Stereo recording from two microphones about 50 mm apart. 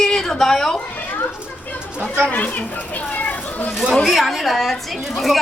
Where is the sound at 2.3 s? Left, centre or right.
Left.